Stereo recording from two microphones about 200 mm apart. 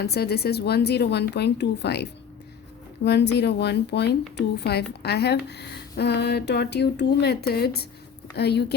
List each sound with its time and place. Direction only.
0.0 s a woman's voice: 55° left (ahead or behind)